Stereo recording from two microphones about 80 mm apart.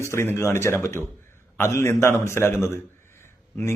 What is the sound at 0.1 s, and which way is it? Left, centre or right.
Speech, left.